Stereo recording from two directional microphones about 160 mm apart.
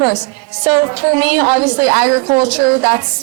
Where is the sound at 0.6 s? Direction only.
20° right (ahead or behind).